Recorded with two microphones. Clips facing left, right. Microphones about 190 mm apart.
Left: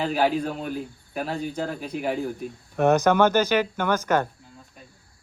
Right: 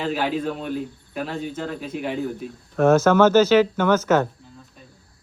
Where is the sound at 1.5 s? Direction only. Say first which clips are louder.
Even; 40° left (ahead or behind).